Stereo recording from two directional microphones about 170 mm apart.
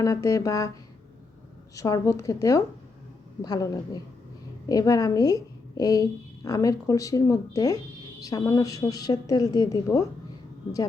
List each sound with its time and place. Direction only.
0.0 s a woman's voice: 20° left (ahead or behind)
1.7 s a woman's voice: 20° left (ahead or behind)